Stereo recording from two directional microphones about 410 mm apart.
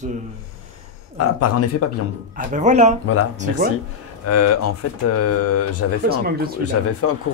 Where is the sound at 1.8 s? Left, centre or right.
Left.